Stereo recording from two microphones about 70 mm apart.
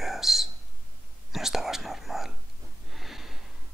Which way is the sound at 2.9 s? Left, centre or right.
Centre.